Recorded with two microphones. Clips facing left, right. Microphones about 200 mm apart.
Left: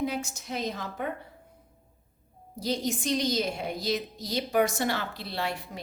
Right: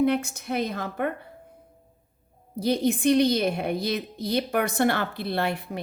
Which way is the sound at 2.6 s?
60° right (ahead or behind).